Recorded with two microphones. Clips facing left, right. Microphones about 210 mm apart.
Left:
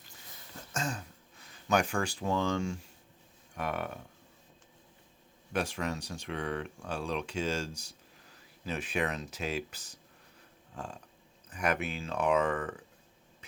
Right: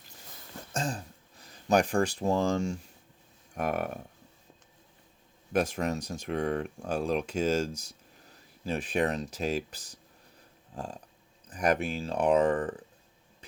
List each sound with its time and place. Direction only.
0.7 s speech: 35° right (ahead or behind)
5.5 s speech: 40° right (ahead or behind)